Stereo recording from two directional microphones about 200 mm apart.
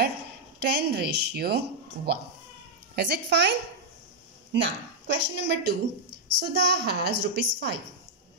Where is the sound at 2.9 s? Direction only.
55° right (ahead or behind).